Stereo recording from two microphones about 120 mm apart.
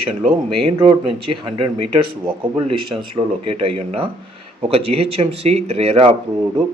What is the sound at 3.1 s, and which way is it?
Speech, 50° right (ahead or behind).